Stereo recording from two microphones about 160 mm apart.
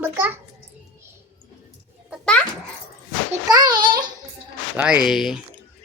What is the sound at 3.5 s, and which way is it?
Speech, 25° right (ahead or behind).